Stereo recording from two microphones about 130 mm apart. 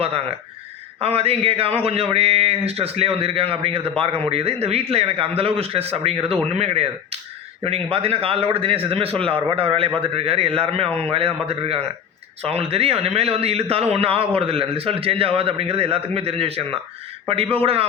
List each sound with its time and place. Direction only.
0.0 s a man's voice: 45° right (ahead or behind)